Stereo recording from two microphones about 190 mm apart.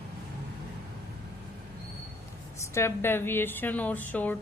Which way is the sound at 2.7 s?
15° left (ahead or behind).